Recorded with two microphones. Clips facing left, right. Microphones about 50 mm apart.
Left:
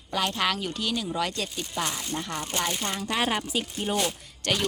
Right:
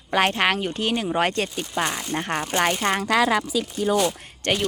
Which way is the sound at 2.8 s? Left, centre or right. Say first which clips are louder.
Right 9 dB; right.